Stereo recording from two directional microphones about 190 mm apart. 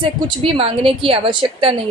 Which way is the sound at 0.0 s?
30° right (ahead or behind).